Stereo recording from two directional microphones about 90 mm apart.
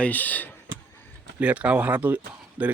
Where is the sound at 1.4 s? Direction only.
15° right (ahead or behind).